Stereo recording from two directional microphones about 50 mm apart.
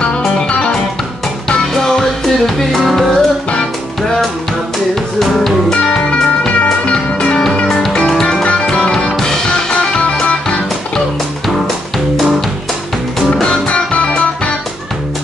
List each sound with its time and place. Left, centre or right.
0.4 s music: left
1.7 s music: centre
5.2 s music: centre
6.0 s music: left
8.1 s music: centre
11.4 s music: centre
13.3 s music: centre